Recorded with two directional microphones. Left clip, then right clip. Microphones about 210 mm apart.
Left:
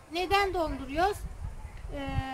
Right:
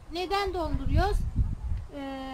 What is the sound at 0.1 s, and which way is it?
A woman's voice, centre (ahead or behind).